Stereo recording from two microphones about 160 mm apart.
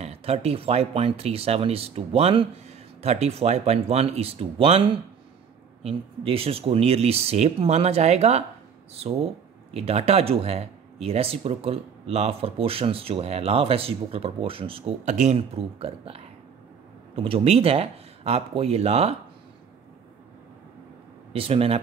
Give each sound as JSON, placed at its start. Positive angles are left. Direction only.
{"t": 0.0, "sound": "speech", "side_deg": -40}
{"t": 9.8, "sound": "speech", "side_deg": -40}
{"t": 21.3, "sound": "speech", "side_deg": -35}